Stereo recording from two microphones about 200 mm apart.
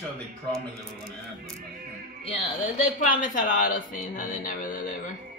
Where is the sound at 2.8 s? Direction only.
40° left (ahead or behind).